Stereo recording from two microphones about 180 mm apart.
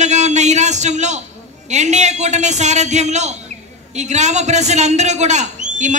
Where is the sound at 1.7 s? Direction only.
40° right (ahead or behind).